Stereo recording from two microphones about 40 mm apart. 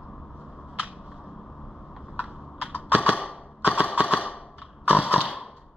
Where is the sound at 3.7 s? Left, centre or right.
Right.